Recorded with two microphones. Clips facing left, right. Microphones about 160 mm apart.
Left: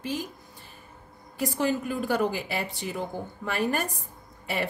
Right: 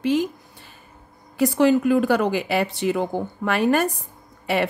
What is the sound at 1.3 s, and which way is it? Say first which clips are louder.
A woman's voice: right 9 dB; 80° right.